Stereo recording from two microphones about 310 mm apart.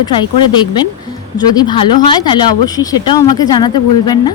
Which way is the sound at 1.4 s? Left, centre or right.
Centre.